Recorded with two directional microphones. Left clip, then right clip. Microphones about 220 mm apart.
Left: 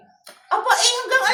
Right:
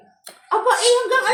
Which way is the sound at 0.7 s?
40° left (ahead or behind).